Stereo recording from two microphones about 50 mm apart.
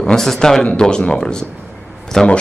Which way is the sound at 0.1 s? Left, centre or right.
Centre.